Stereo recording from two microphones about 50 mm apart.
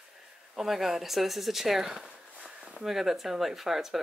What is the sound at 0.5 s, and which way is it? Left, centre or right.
A woman's voice, centre.